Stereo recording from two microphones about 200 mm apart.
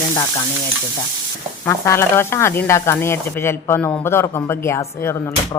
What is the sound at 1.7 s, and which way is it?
A woman's voice, 10° left (ahead or behind).